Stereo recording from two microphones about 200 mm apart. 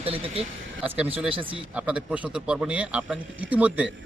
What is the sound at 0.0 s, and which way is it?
Speech, 30° right (ahead or behind).